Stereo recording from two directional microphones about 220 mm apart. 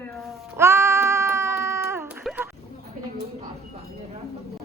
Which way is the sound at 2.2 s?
Centre (ahead or behind).